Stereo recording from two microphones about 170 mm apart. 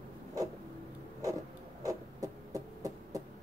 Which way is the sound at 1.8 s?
20° right (ahead or behind).